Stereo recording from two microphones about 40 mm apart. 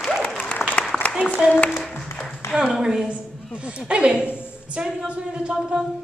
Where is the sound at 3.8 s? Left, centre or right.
Right.